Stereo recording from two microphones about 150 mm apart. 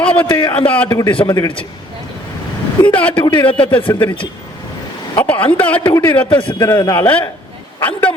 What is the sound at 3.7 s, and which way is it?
Speech, 10° left (ahead or behind).